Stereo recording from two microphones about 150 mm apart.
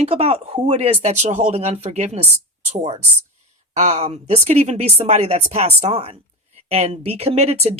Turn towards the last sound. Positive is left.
turn(degrees=-45)  # may be behind; listen again after turning